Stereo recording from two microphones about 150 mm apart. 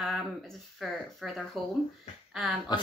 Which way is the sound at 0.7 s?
Centre (ahead or behind).